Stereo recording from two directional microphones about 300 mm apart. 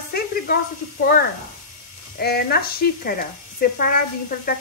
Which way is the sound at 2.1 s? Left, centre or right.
Left.